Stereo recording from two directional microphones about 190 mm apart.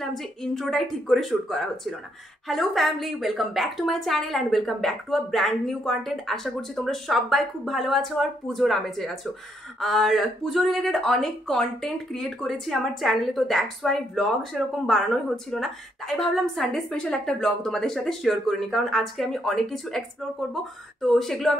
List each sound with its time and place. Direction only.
0.0 s speech: centre (ahead or behind)